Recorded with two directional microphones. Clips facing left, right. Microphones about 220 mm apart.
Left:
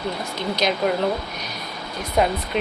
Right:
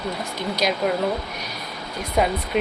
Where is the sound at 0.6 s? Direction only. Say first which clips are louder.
Left 1 dB; 10° right (ahead or behind).